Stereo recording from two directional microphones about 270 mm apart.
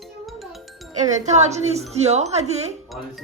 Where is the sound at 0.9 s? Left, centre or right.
Right.